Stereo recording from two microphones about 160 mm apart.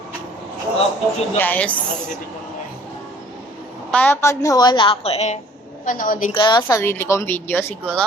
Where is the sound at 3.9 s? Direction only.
10° left (ahead or behind); by 5.3 s 40° left (ahead or behind).